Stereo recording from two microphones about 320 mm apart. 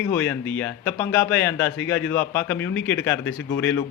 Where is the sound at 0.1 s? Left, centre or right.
Centre.